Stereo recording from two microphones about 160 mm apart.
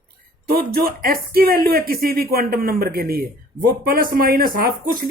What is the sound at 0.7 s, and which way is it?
Speech, 65° right (ahead or behind).